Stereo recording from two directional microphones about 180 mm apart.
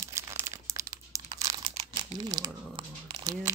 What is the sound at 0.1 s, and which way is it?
Crumpling, 15° right (ahead or behind).